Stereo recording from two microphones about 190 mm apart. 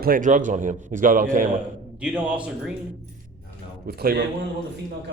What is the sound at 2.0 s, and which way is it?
Speech, 5° right (ahead or behind).